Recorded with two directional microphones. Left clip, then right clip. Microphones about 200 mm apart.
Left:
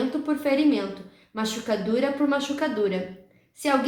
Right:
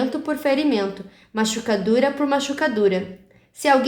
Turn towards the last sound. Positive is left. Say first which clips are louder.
# right 6 dB
turn(degrees=-50)  # may be behind; listen again after turning